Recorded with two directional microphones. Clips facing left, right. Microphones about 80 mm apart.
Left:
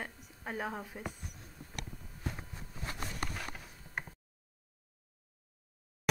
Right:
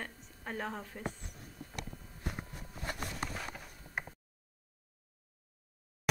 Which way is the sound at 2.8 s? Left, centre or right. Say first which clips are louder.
Right 2 dB; right.